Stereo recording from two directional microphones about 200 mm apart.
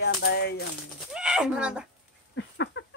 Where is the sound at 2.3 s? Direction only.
65° left (ahead or behind).